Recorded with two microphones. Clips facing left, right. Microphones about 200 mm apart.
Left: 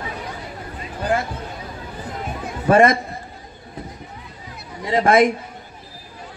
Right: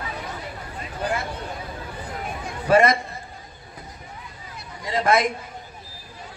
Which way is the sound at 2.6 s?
50° left (ahead or behind).